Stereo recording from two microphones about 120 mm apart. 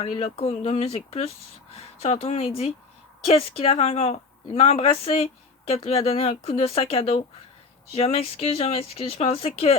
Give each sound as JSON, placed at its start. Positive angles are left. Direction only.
{"t": 0.0, "sound": "speech", "side_deg": 55}